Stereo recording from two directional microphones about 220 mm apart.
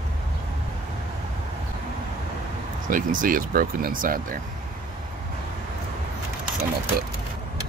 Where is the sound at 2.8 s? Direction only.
40° right (ahead or behind).